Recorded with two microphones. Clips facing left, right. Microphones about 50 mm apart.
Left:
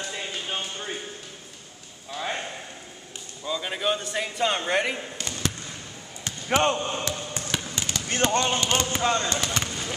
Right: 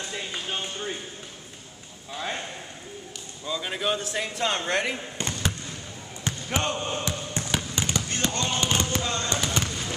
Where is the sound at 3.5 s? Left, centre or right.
Centre.